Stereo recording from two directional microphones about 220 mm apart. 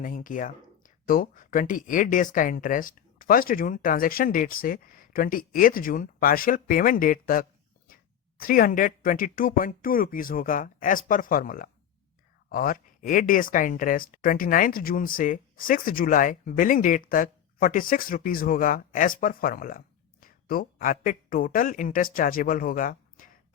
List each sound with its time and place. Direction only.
0.0 s a man's voice: 40° left (ahead or behind)